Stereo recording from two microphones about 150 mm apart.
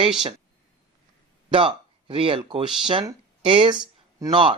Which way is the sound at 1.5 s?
35° right (ahead or behind).